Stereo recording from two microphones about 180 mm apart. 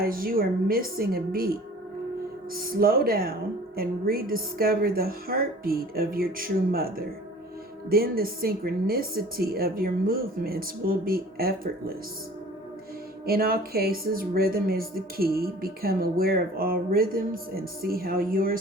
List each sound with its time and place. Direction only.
0.0 s a woman's voice: 55° right (ahead or behind)
13.2 s a woman's voice: 55° right (ahead or behind)